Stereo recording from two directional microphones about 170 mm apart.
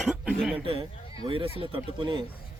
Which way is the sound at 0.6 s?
30° right (ahead or behind).